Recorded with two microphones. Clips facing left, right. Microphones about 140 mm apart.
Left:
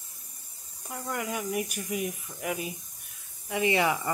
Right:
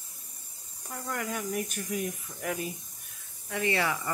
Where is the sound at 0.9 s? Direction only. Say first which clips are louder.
Left 1 dB; 10° left (ahead or behind).